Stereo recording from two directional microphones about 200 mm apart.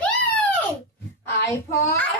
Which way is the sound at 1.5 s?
15° left (ahead or behind).